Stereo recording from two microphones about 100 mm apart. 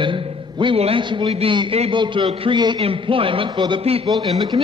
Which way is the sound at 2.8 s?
65° right (ahead or behind).